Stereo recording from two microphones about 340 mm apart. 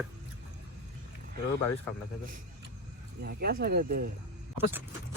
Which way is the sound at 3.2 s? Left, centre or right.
Right.